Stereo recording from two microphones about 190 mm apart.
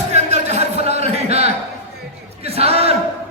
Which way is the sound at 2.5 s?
30° right (ahead or behind).